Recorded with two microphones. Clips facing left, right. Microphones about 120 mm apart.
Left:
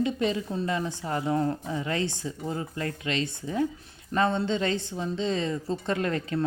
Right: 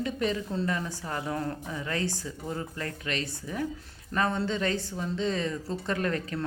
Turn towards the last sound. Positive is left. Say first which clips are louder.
# left 3 dB
turn(degrees=25)  # may be behind; listen again after turning